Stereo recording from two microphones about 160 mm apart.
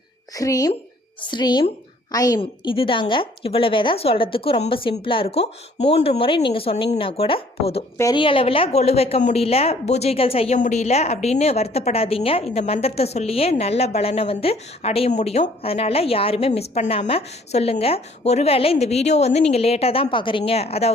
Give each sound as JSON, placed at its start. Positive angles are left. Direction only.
{"t": 0.3, "sound": "a woman's voice", "side_deg": 20}
{"t": 2.4, "sound": "a woman's voice", "side_deg": 35}